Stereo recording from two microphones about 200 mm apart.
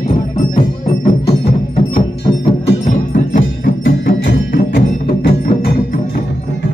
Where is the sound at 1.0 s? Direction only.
30° left (ahead or behind).